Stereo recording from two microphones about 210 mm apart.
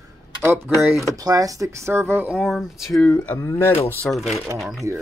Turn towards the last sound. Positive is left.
turn(degrees=0)  # may be behind; listen again after turning